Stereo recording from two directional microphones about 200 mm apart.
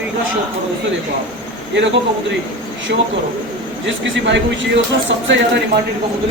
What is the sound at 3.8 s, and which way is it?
Speech, 65° right (ahead or behind).